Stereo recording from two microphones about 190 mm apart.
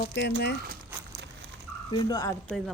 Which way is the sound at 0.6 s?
55° right (ahead or behind).